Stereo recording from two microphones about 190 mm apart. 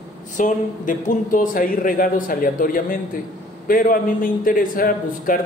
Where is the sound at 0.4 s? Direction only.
45° left (ahead or behind).